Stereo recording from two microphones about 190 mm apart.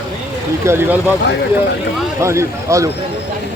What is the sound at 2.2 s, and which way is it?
Speech, 15° right (ahead or behind).